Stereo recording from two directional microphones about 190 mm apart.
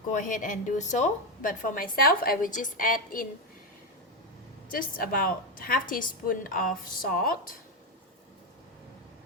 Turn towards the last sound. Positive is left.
turn(degrees=50)  # may be behind; listen again after turning